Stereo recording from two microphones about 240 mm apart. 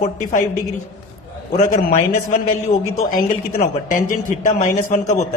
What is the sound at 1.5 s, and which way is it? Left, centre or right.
A woman's voice, left.